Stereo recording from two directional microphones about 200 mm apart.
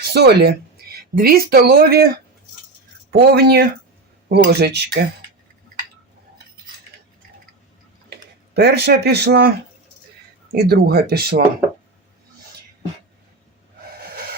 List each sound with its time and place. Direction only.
0.0 s speech: 55° right (ahead or behind)
8.5 s speech: 55° right (ahead or behind)
10.5 s speech: 50° right (ahead or behind)